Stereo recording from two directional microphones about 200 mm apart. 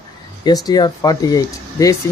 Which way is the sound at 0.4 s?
20° left (ahead or behind).